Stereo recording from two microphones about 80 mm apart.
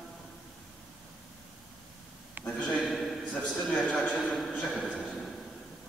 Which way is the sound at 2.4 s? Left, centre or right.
Right.